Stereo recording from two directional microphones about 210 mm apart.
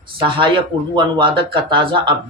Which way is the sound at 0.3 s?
25° right (ahead or behind).